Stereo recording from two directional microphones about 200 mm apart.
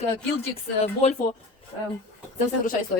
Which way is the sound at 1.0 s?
30° left (ahead or behind).